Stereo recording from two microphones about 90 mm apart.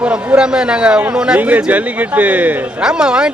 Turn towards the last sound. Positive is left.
turn(degrees=-10)  # may be behind; listen again after turning